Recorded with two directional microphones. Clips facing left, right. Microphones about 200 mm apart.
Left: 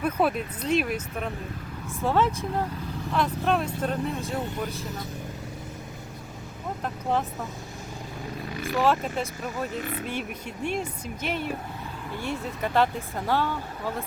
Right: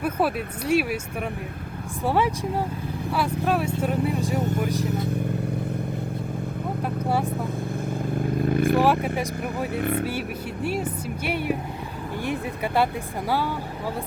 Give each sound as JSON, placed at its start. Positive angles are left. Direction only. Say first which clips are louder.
{"t": 0.0, "sound": "speech", "louder": "right 1 dB", "side_deg": -5}
{"t": 4.9, "sound": "speech", "louder": "right 9 dB", "side_deg": -60}
{"t": 6.8, "sound": "speech", "louder": "right 2 dB", "side_deg": -10}
{"t": 8.1, "sound": "vehicle", "louder": "right 12 dB", "side_deg": -55}
{"t": 9.1, "sound": "speech", "louder": "right 3 dB", "side_deg": -15}
{"t": 9.7, "sound": "speech", "louder": "right 7 dB", "side_deg": -55}
{"t": 10.1, "sound": "speech", "louder": "right 4 dB", "side_deg": -5}